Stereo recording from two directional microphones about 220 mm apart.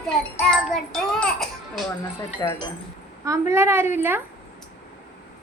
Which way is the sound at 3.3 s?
10° right (ahead or behind).